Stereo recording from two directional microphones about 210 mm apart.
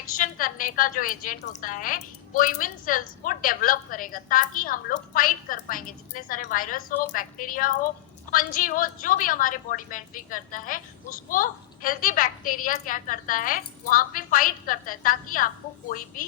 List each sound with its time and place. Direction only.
0.2 s a woman's voice: 40° left (ahead or behind)